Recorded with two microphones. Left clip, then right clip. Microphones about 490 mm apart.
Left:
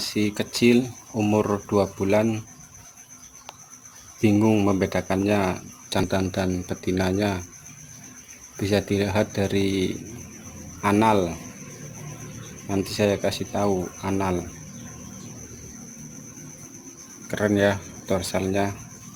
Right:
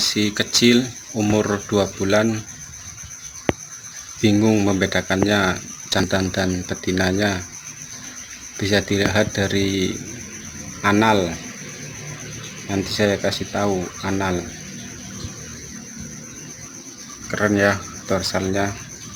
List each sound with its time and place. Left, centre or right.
0.0 s speech: left
4.2 s speech: left
8.5 s speech: left
12.6 s speech: left
17.3 s speech: left